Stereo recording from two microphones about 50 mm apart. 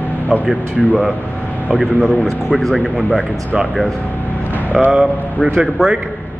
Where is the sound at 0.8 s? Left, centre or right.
Centre.